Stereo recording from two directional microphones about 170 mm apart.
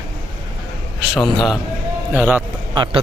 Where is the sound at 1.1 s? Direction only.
Centre (ahead or behind).